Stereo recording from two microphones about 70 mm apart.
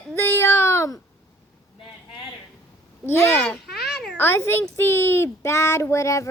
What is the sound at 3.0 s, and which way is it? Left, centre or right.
Speech, left.